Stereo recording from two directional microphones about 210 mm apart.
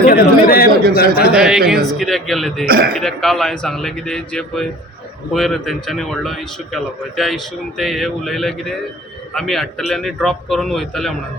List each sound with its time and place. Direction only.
0.1 s speech: 45° left (ahead or behind)
1.3 s a man's voice: 5° right (ahead or behind)
2.6 s a man's voice: 45° right (ahead or behind)
2.9 s a man's voice: centre (ahead or behind)